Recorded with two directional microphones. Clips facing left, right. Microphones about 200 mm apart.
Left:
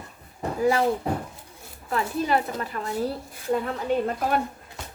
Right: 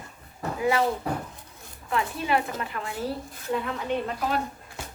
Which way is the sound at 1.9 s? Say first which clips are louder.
Left 2 dB; 40° left (ahead or behind).